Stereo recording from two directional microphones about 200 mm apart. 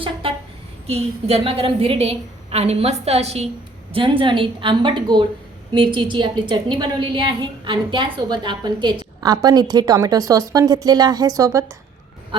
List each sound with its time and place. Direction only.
0.0 s a woman's voice: 25° right (ahead or behind)